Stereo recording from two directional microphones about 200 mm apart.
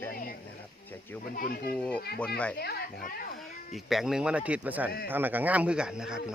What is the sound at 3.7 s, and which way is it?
Speech, centre (ahead or behind).